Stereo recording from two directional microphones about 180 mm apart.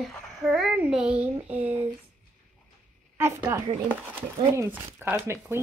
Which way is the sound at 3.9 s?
10° right (ahead or behind).